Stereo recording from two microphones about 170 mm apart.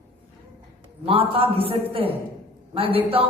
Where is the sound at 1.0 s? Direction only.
35° right (ahead or behind).